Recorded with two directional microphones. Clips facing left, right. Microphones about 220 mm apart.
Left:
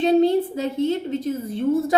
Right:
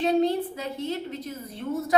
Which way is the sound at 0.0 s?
25° left (ahead or behind).